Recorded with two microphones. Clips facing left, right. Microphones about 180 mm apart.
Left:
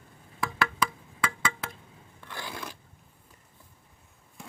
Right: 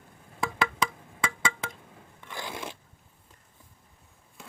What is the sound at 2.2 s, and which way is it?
Scrape, 20° right (ahead or behind).